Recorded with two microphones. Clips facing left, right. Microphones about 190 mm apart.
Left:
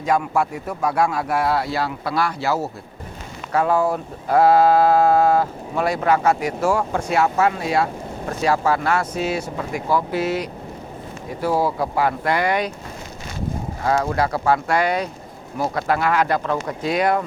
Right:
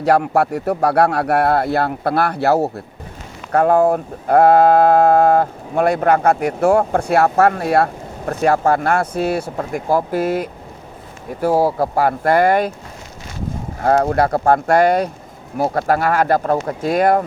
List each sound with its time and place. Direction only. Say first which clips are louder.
0.0 s speech: right 5 dB; 65° right (ahead or behind); by 12.7 s 50° right (ahead or behind)
13.8 s speech: right 5 dB; 50° right (ahead or behind)